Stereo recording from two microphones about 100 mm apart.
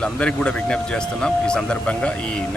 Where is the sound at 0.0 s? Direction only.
10° left (ahead or behind).